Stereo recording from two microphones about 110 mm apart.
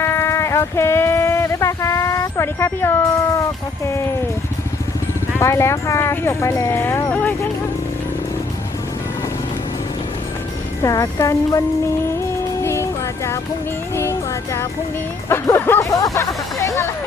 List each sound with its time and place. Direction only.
0.0 s a sound: 25° left (ahead or behind)
5.4 s speech: 25° left (ahead or behind)
10.8 s speech: 30° left (ahead or behind)
12.6 s music: 25° left (ahead or behind)
15.3 s speech: 20° left (ahead or behind)